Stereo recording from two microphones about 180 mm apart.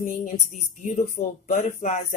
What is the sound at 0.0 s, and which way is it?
A woman's voice, 45° left (ahead or behind).